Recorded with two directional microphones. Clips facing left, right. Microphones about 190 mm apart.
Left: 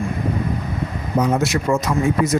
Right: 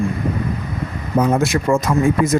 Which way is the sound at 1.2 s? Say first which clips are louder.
Right 2 dB; 50° right (ahead or behind).